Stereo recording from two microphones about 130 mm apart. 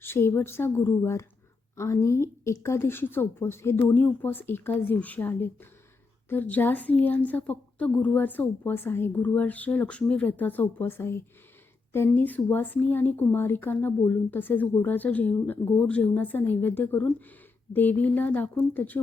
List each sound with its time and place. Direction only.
0.0 s a woman's voice: 15° left (ahead or behind)